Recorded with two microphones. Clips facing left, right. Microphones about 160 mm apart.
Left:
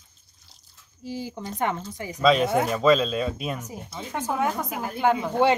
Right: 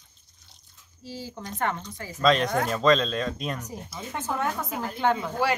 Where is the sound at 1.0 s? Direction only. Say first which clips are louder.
Left 5 dB; 15° left (ahead or behind).